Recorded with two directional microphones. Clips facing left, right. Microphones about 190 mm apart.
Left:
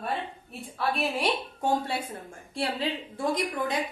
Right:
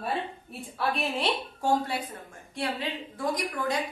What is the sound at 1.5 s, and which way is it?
A woman's voice, 20° left (ahead or behind).